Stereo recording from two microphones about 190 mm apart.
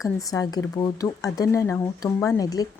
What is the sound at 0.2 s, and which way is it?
A woman's voice, 20° left (ahead or behind).